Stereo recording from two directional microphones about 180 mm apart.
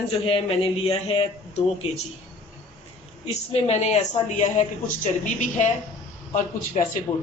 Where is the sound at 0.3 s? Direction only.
30° left (ahead or behind).